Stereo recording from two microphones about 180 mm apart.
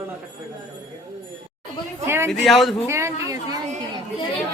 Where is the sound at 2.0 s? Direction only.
15° right (ahead or behind).